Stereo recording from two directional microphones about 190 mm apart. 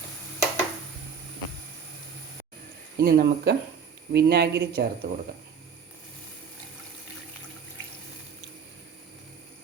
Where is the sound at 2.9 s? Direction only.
55° right (ahead or behind).